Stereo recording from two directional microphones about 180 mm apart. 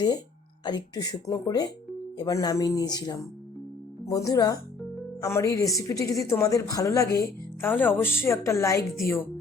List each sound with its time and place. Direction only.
0.6 s a woman's voice: 25° left (ahead or behind)